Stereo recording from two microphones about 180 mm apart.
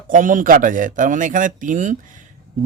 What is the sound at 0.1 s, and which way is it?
Speech, 45° right (ahead or behind).